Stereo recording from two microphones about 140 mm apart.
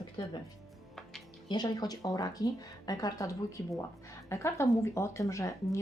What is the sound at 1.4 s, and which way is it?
A woman's voice, 30° left (ahead or behind).